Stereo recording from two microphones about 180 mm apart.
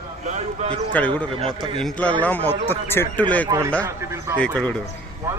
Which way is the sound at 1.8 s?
5° left (ahead or behind).